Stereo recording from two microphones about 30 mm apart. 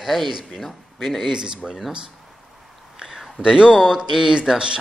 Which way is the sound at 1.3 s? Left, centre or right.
Right.